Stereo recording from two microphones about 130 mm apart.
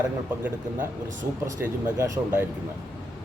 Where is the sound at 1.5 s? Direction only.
20° right (ahead or behind).